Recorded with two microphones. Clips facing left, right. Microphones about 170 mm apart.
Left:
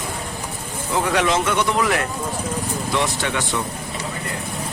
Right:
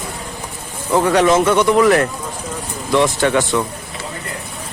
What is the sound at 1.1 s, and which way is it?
Speech, 45° right (ahead or behind).